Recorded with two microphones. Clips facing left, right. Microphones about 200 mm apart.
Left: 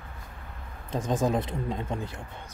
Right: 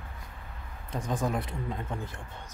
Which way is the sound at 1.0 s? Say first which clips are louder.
Left 5 dB; 20° left (ahead or behind).